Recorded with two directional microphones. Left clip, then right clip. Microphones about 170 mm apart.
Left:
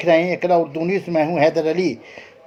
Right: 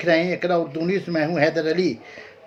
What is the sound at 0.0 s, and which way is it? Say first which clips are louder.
A man's voice: left 4 dB; 20° left (ahead or behind).